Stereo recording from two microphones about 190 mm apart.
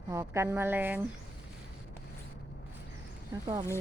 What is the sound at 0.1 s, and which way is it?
Speech, 15° right (ahead or behind).